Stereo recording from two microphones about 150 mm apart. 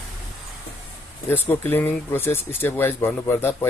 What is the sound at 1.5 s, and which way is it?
Speech, 10° left (ahead or behind).